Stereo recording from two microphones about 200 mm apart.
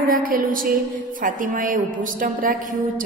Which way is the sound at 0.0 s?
45° right (ahead or behind).